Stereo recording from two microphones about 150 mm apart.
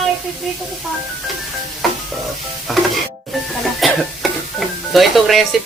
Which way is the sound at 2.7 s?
Centre (ahead or behind).